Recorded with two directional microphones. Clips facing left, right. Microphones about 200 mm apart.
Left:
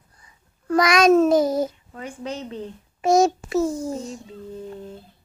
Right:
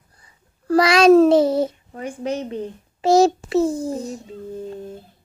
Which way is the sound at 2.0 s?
50° right (ahead or behind).